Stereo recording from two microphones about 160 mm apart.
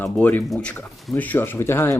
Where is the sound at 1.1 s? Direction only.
10° left (ahead or behind).